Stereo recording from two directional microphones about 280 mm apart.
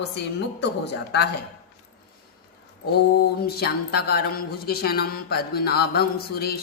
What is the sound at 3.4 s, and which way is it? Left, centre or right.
Mantra, left.